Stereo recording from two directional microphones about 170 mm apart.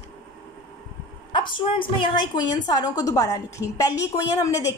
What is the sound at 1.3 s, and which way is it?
A woman's voice, 30° left (ahead or behind).